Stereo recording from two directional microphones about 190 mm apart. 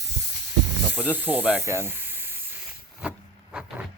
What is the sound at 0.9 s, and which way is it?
Speech, 10° right (ahead or behind).